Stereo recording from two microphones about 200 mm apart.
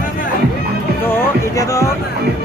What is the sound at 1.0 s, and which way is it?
Music, 15° left (ahead or behind).